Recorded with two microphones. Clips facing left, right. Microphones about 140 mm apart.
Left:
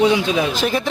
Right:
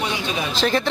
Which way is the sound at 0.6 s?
10° left (ahead or behind).